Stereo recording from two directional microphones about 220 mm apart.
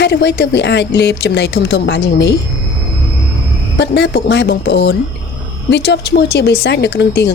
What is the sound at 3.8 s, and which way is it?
Speech, 50° left (ahead or behind).